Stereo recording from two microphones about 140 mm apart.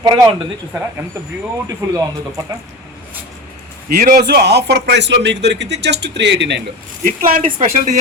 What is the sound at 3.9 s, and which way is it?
Speech, 90° right.